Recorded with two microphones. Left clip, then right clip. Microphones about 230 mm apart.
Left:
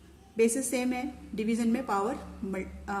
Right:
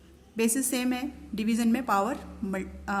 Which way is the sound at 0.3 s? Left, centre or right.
Right.